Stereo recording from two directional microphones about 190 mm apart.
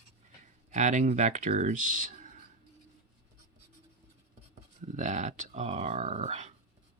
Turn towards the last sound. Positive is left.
turn(degrees=-35)  # may be behind; listen again after turning